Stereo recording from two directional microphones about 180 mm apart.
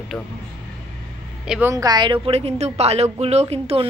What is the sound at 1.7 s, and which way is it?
Speech, 20° right (ahead or behind).